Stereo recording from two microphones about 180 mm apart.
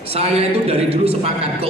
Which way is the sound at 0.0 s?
35° right (ahead or behind).